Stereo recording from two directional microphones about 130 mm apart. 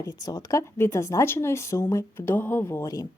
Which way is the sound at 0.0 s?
30° left (ahead or behind).